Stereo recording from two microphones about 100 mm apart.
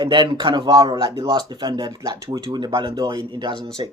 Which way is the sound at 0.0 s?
55° right (ahead or behind).